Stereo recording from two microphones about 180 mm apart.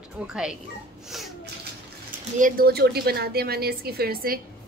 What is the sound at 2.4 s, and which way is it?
A woman's voice, 50° right (ahead or behind).